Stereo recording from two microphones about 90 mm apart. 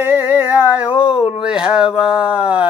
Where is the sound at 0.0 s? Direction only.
20° right (ahead or behind).